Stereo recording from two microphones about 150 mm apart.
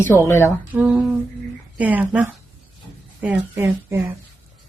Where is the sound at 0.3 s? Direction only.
20° left (ahead or behind).